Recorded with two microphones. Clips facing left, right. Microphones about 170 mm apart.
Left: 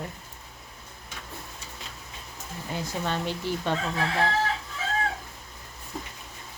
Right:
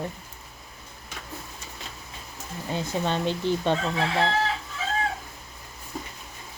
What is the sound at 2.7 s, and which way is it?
Speech, 20° right (ahead or behind).